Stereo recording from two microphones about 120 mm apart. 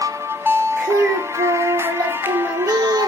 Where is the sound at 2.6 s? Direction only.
30° right (ahead or behind).